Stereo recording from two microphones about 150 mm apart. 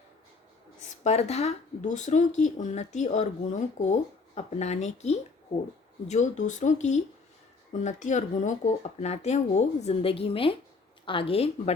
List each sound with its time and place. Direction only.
1.0 s speech: 45° left (ahead or behind)